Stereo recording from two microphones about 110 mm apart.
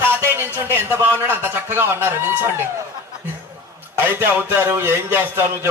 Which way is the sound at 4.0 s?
20° right (ahead or behind).